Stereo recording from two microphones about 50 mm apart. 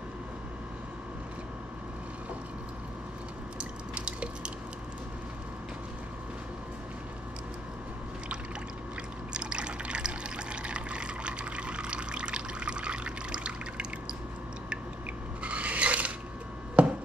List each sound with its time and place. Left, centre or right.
3.9 s drip: right
9.3 s water: centre
15.4 s filing: right
16.8 s a sound: right